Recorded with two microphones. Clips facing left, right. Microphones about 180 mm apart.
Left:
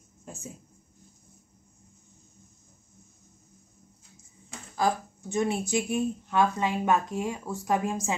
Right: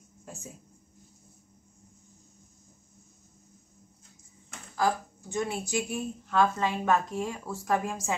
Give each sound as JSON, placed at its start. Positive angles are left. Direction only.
{"t": 4.7, "sound": "speech", "side_deg": 20}